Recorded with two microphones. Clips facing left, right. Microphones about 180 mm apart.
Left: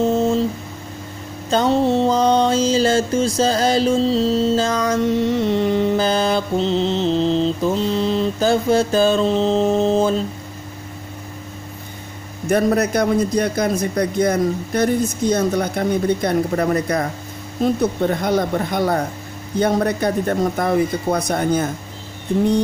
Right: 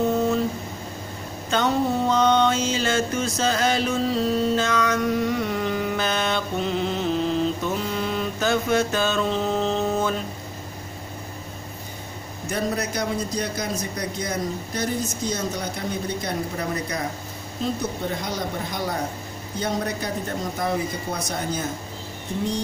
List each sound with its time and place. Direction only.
0.0 s a sound: 25° left (ahead or behind)
1.5 s mantra: 30° left (ahead or behind)
12.4 s a man's voice: 60° left (ahead or behind)
18.2 s a man's voice: 55° left (ahead or behind)